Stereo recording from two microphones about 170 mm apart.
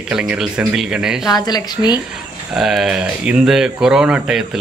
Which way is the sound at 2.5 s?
Centre (ahead or behind).